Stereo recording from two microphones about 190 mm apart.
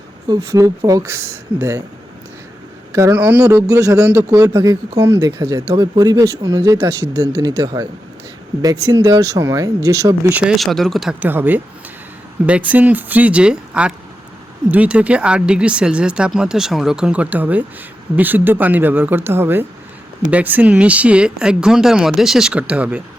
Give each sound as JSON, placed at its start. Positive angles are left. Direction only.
{"t": 0.3, "sound": "a man's voice", "side_deg": -15}
{"t": 2.9, "sound": "a man's voice", "side_deg": -15}